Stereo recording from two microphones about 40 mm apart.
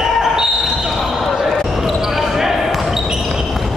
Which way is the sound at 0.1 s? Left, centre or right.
Centre.